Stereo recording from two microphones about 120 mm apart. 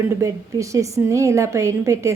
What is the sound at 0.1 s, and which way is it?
A woman's voice, 25° right (ahead or behind).